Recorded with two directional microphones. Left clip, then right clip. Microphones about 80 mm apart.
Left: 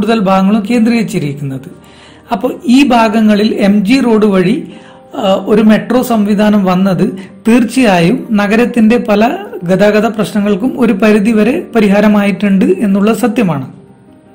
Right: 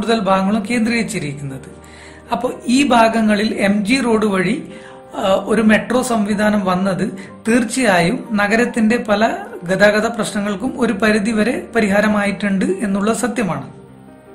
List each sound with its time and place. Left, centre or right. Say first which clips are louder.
0.0 s a man's voice: left 5 dB; left